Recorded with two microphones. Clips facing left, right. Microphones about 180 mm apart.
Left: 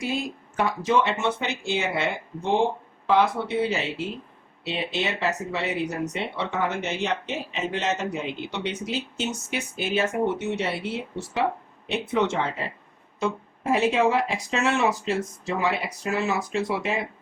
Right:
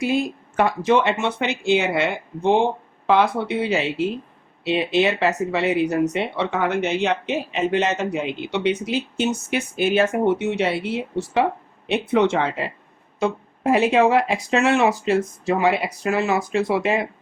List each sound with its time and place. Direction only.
0.1 s speech: 65° right (ahead or behind)